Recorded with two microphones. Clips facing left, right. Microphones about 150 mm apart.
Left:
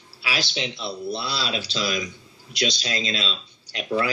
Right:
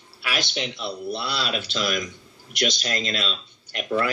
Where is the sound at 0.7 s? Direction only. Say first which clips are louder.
Even; 15° right (ahead or behind).